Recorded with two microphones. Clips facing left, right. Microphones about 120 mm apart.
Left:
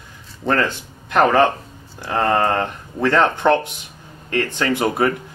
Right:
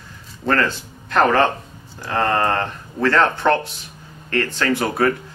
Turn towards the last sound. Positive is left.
turn(degrees=20)  # may be behind; listen again after turning